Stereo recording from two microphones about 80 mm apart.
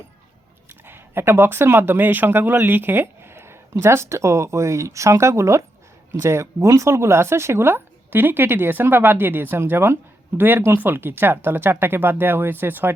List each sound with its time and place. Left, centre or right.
0.7 s speech: right